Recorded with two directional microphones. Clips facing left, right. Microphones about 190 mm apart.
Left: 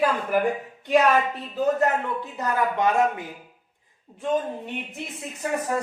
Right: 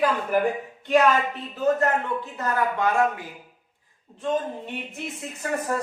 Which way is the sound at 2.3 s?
20° left (ahead or behind).